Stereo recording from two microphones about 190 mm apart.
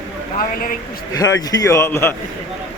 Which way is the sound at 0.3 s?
50° left (ahead or behind).